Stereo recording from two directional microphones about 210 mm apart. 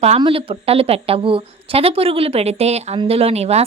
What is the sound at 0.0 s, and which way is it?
A woman's voice, 25° right (ahead or behind).